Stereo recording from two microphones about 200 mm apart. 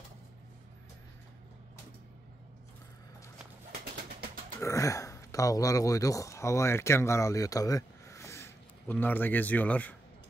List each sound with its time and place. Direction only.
3.7 s bird: 50° right (ahead or behind)
4.6 s speech: 15° left (ahead or behind)